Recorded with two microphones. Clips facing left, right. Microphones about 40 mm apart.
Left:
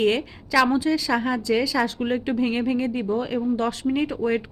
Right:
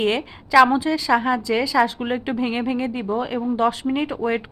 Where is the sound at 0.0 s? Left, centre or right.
Centre.